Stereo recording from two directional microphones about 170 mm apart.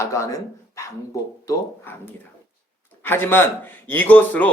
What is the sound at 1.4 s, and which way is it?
Speech, 15° left (ahead or behind).